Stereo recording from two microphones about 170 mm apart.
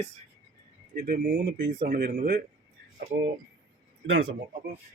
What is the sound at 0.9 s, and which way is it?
Speech, 55° right (ahead or behind).